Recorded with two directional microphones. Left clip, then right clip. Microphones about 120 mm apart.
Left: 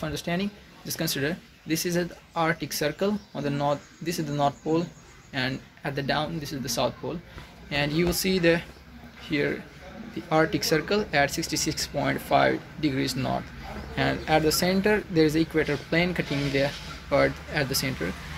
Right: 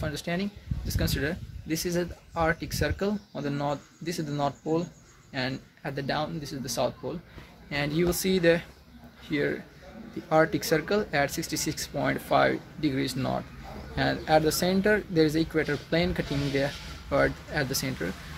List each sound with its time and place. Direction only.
0.0 s speech: 5° right (ahead or behind); by 17.9 s 25° right (ahead or behind)